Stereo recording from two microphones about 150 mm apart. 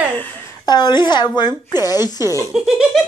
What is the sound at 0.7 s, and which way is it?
Speech, 30° left (ahead or behind).